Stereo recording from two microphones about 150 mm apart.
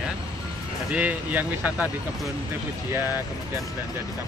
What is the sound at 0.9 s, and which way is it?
Speech, 10° right (ahead or behind).